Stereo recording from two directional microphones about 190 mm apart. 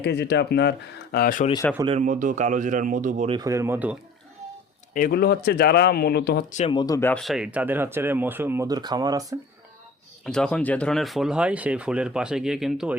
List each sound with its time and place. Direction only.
0.0 s speech: 60° left (ahead or behind)
1.1 s speech: 50° left (ahead or behind)
2.0 s speech: 45° right (ahead or behind)
3.2 s speech: 20° right (ahead or behind)
4.9 s speech: 50° left (ahead or behind)
6.5 s speech: 35° left (ahead or behind)
6.7 s speech: 20° left (ahead or behind)
7.1 s speech: centre (ahead or behind); by 9.4 s 20° right (ahead or behind)
10.2 s speech: 5° left (ahead or behind)